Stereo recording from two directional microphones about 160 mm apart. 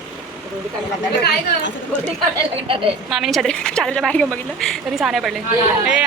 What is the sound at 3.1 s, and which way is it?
A woman's voice, centre (ahead or behind).